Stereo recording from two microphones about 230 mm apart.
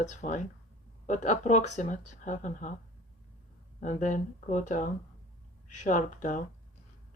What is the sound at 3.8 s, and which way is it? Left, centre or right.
Speech, left.